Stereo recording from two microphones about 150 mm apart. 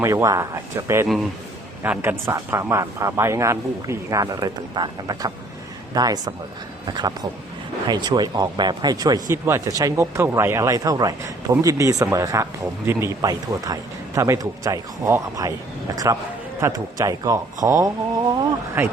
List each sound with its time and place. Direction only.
0.0 s a man's voice: 20° right (ahead or behind)